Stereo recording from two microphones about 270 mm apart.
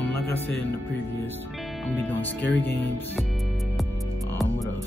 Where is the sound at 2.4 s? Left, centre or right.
Left.